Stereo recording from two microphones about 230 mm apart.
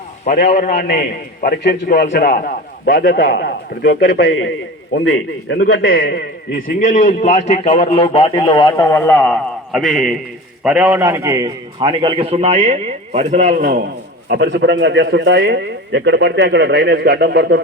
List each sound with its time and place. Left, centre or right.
0.3 s a man's voice: left; by 17.6 s right